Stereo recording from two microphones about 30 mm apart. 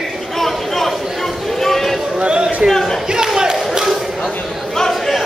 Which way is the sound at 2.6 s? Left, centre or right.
Right.